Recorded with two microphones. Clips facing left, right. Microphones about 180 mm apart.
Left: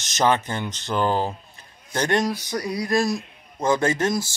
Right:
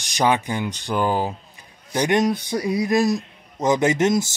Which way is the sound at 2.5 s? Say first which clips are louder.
Right 3 dB; 25° right (ahead or behind).